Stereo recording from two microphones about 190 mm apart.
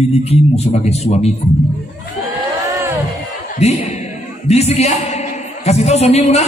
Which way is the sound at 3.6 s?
35° left (ahead or behind).